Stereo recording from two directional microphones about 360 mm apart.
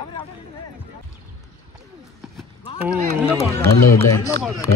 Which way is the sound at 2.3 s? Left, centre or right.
Centre.